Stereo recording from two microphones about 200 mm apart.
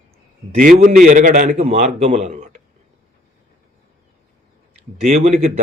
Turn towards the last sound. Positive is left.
turn(degrees=-30)  # may be behind; listen again after turning